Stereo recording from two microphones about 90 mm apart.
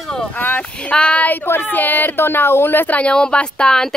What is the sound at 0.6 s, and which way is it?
Speech, 10° left (ahead or behind).